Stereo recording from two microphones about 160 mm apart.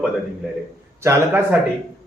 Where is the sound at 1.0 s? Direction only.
15° right (ahead or behind).